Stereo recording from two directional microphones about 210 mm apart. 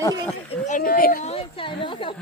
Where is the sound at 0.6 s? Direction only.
40° left (ahead or behind).